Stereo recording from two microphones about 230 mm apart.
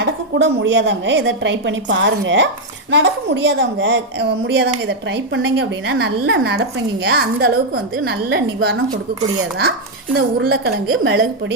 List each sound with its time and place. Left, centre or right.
0.0 s a woman's voice: right
8.1 s a woman's voice: right
10.2 s a woman's voice: right